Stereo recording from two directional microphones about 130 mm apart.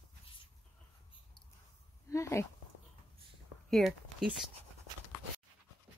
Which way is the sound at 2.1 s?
20° left (ahead or behind).